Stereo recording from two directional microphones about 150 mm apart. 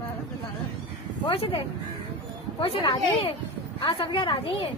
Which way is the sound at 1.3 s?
35° left (ahead or behind).